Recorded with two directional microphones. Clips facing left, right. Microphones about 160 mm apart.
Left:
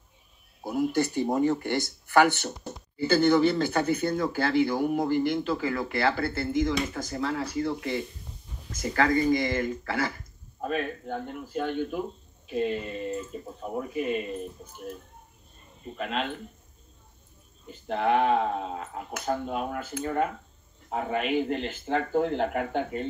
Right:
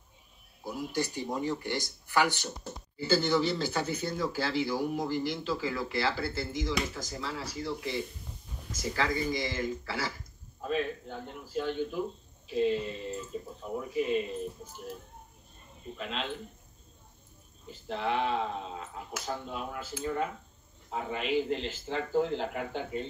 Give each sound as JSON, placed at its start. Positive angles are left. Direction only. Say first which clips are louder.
{"t": 0.7, "sound": "speech", "louder": "left 7 dB", "side_deg": 55}
{"t": 16.0, "sound": "speech", "louder": "left 5 dB", "side_deg": 55}
{"t": 17.6, "sound": "speech", "louder": "left 6 dB", "side_deg": 55}